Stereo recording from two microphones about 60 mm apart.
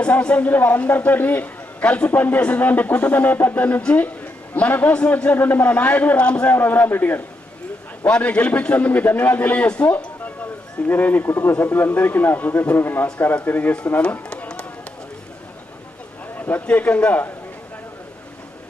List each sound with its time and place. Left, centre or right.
0.0 s a man's voice: centre
5.3 s a man's voice: left
8.0 s a man's voice: centre
14.4 s run: centre
16.4 s a man's voice: left